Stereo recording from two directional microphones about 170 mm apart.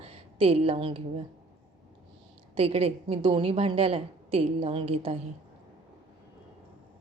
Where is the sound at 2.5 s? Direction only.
35° right (ahead or behind).